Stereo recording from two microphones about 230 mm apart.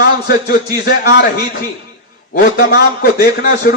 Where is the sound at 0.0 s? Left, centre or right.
Left.